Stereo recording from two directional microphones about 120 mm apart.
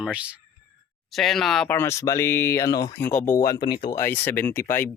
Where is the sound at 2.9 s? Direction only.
15° left (ahead or behind).